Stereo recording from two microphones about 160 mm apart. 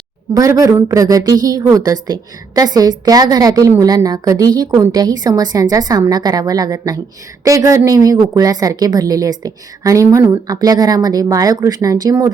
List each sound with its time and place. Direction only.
0.3 s a woman's voice: 20° right (ahead or behind)